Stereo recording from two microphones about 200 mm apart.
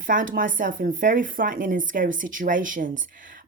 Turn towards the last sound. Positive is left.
turn(degrees=-40)  # may be behind; listen again after turning